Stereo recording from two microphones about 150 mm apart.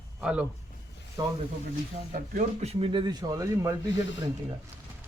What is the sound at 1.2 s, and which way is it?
Speech, 30° right (ahead or behind).